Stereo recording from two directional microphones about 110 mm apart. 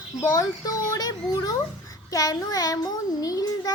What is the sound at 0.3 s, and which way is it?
A child's voice, 30° left (ahead or behind).